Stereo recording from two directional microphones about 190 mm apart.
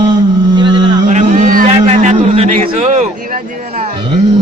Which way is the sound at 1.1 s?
40° right (ahead or behind).